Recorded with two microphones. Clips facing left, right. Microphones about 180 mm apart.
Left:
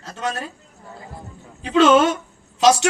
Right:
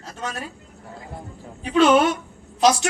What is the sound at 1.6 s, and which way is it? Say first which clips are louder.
Speech: left 2 dB; 80° left.